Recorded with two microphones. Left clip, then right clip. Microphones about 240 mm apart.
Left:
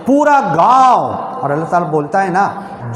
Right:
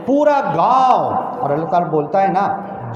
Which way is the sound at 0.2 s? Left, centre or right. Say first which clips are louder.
Left 3 dB; left.